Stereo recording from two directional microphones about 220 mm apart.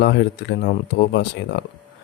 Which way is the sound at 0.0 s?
50° left (ahead or behind).